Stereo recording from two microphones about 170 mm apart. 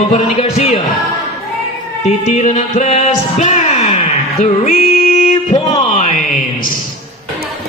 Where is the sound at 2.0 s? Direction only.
40° left (ahead or behind).